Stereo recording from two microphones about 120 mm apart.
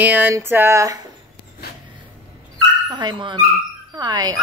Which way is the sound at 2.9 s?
40° right (ahead or behind).